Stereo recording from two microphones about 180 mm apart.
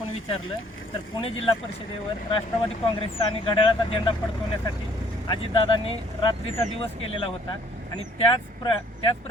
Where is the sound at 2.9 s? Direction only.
30° left (ahead or behind).